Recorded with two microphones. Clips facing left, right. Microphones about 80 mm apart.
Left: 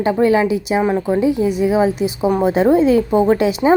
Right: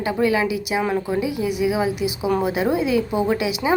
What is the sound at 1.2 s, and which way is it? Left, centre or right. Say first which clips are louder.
A woman's voice: left 6 dB; left.